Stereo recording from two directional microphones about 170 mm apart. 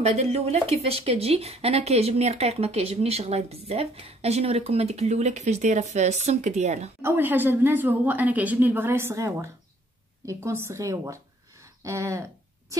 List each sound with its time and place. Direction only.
0.0 s speech: 40° right (ahead or behind)
7.0 s a woman's voice: 10° right (ahead or behind)
11.8 s a sound: 15° right (ahead or behind)